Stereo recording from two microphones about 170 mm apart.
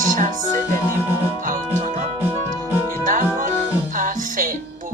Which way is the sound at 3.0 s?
50° right (ahead or behind).